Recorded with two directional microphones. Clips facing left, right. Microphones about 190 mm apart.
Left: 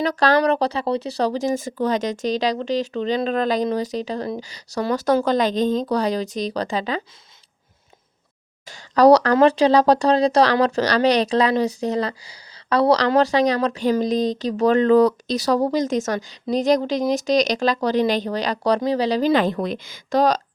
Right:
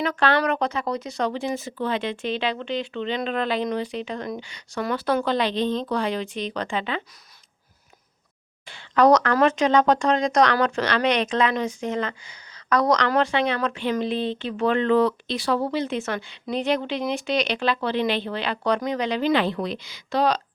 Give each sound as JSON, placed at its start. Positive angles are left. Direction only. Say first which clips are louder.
{"t": 0.0, "sound": "speech", "louder": "left 4 dB", "side_deg": 35}
{"t": 8.6, "sound": "a woman's voice", "louder": "left 4 dB", "side_deg": 40}